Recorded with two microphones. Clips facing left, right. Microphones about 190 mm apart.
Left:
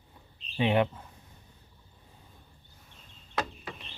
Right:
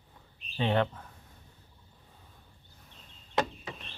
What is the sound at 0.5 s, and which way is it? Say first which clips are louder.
Speech: left 2 dB; 10° left (ahead or behind).